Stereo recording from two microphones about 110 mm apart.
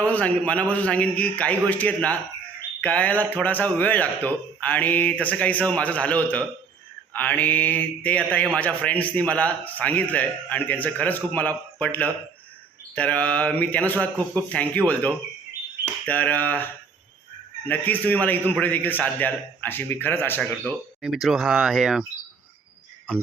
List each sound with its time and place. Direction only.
0.1 s speech: 15° left (ahead or behind)
17.7 s speech: 15° left (ahead or behind)
21.0 s speech: centre (ahead or behind)